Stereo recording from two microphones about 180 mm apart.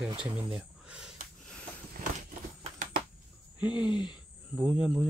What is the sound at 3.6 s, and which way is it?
Speech, 5° right (ahead or behind).